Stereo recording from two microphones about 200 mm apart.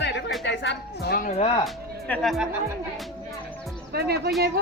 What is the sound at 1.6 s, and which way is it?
Speech, centre (ahead or behind).